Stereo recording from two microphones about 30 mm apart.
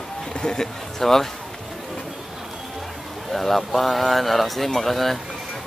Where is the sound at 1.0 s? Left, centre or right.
Centre.